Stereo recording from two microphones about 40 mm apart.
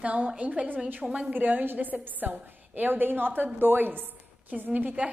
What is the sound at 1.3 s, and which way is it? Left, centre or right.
Speech, right.